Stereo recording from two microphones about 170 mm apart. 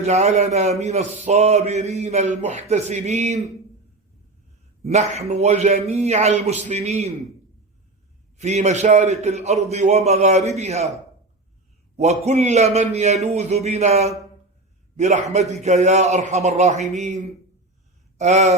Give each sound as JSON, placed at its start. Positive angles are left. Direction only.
{"t": 0.0, "sound": "a man's voice", "side_deg": -40}
{"t": 4.8, "sound": "a man's voice", "side_deg": -40}
{"t": 8.4, "sound": "a man's voice", "side_deg": -40}
{"t": 11.9, "sound": "a man's voice", "side_deg": -40}